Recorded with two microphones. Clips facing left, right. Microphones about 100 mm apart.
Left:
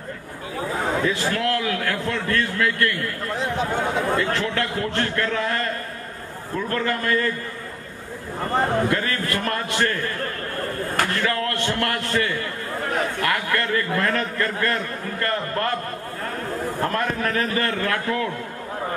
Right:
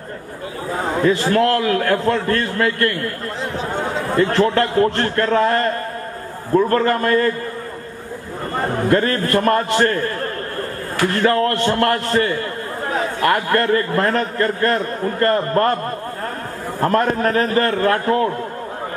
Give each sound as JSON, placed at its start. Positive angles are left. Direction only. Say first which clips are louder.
{"t": 1.0, "sound": "a man's voice", "louder": "right 7 dB", "side_deg": -45}
{"t": 4.2, "sound": "a man's voice", "louder": "right 8 dB", "side_deg": -40}
{"t": 8.9, "sound": "a man's voice", "louder": "right 8 dB", "side_deg": -40}
{"t": 16.8, "sound": "a man's voice", "louder": "right 9 dB", "side_deg": -40}